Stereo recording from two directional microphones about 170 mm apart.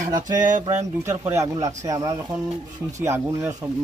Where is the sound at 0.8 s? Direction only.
15° right (ahead or behind).